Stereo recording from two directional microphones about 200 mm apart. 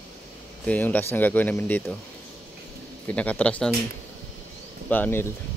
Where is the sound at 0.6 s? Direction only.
10° left (ahead or behind).